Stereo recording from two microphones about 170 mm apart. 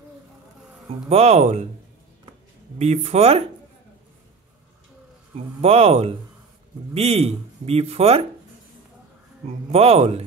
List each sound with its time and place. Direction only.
1.0 s speech: 35° right (ahead or behind)
2.8 s speech: 40° right (ahead or behind)
5.3 s speech: 35° right (ahead or behind)
9.7 s speech: 35° right (ahead or behind)